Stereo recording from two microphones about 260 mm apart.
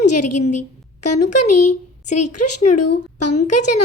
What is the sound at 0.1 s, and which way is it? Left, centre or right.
Speech, left.